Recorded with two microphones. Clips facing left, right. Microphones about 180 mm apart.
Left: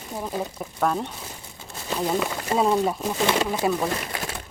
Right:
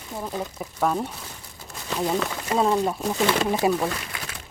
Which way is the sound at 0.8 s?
5° right (ahead or behind).